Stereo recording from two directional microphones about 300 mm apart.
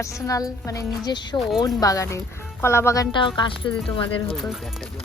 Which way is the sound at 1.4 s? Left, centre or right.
Centre.